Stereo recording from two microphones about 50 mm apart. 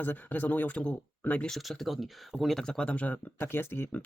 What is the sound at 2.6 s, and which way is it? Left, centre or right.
Speech, centre.